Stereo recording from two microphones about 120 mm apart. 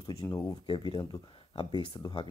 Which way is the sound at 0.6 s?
40° left (ahead or behind).